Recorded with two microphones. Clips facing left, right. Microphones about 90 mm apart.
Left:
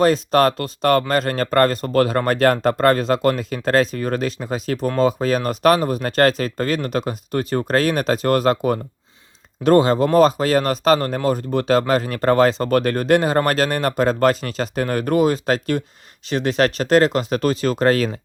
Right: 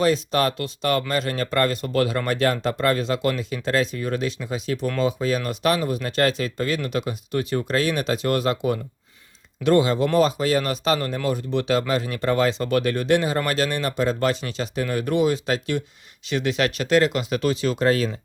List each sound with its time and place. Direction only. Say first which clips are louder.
0.0 s speech: left 5 dB; 45° left (ahead or behind)